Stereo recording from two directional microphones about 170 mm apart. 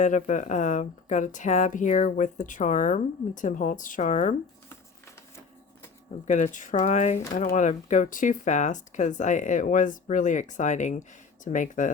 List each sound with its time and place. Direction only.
0.0 s a woman's voice: 50° left (ahead or behind)
6.2 s a woman's voice: 45° left (ahead or behind)